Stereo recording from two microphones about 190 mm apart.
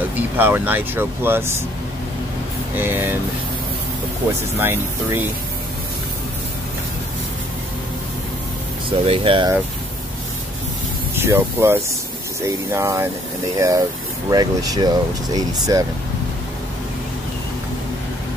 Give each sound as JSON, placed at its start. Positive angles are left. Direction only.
{"t": 0.1, "sound": "speech", "side_deg": -10}
{"t": 2.7, "sound": "speech", "side_deg": -10}
{"t": 4.6, "sound": "speech", "side_deg": -10}
{"t": 8.9, "sound": "speech", "side_deg": -30}
{"t": 11.1, "sound": "speech", "side_deg": -10}